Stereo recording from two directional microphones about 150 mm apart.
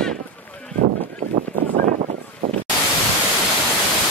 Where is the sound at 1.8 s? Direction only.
55° right (ahead or behind).